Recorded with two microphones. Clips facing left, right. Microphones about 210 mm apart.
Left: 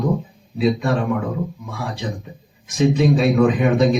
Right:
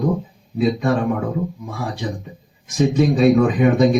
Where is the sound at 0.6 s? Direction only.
45° right (ahead or behind).